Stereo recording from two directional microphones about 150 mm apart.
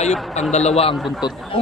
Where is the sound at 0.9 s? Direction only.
Centre (ahead or behind).